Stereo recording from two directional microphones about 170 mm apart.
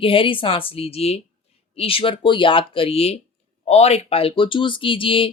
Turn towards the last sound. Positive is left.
turn(degrees=30)  # may be behind; listen again after turning